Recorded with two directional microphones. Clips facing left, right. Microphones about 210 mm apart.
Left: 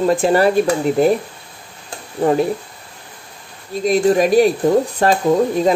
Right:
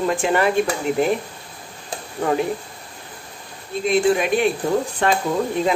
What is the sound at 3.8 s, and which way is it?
Speech, 40° left (ahead or behind).